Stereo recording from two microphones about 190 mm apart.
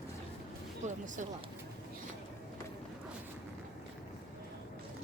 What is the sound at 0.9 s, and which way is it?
Speech, 40° right (ahead or behind).